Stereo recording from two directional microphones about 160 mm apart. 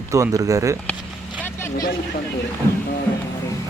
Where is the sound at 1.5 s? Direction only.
15° left (ahead or behind).